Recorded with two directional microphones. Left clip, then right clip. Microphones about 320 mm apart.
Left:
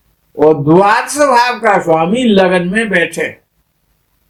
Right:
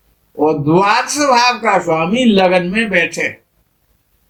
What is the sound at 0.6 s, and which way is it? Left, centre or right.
Speech, left.